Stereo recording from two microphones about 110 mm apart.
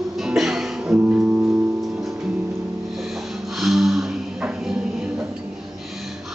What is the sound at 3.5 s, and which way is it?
Music, centre (ahead or behind).